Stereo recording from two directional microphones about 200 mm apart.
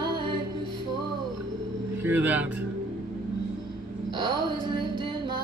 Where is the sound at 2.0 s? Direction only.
10° right (ahead or behind).